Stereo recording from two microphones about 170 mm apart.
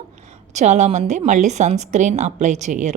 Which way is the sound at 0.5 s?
45° right (ahead or behind).